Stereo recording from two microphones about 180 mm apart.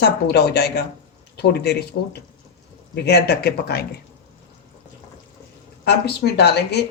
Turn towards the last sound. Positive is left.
turn(degrees=65)  # may be behind; listen again after turning